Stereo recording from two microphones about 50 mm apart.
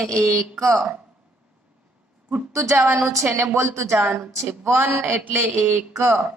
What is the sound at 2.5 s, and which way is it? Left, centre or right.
Speech, right.